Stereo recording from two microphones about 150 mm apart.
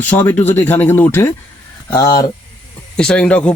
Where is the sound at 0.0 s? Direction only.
10° left (ahead or behind).